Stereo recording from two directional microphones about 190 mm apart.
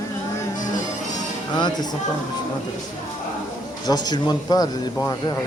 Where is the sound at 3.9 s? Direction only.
20° left (ahead or behind).